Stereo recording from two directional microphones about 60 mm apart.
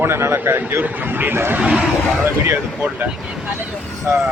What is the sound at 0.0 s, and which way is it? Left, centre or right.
A man's voice, right.